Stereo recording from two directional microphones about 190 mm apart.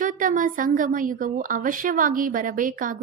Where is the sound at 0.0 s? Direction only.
45° right (ahead or behind).